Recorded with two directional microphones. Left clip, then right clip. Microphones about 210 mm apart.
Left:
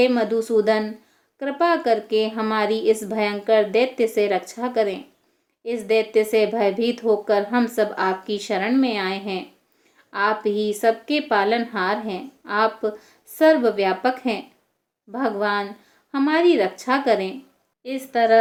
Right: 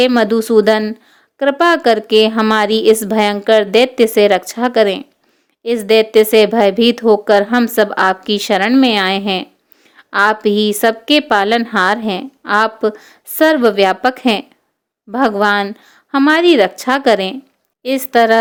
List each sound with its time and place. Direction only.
0.0 s a woman's voice: 55° right (ahead or behind)